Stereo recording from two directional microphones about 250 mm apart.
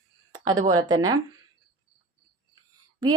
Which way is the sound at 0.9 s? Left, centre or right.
Centre.